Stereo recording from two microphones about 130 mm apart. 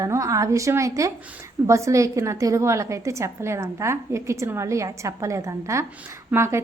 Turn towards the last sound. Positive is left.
turn(degrees=-20)  # may be behind; listen again after turning